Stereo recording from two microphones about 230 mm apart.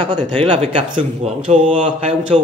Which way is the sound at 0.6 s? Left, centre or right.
Right.